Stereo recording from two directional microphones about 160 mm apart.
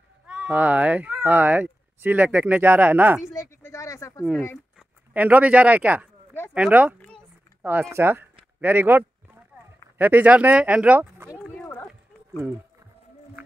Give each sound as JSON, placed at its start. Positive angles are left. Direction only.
{"t": 0.3, "sound": "speech", "side_deg": -5}
{"t": 3.3, "sound": "speech", "side_deg": 20}
{"t": 4.7, "sound": "speech", "side_deg": -10}
{"t": 7.0, "sound": "a sound", "side_deg": 5}
{"t": 7.9, "sound": "speech", "side_deg": -15}
{"t": 8.5, "sound": "a sound", "side_deg": -10}
{"t": 9.9, "sound": "speech", "side_deg": -10}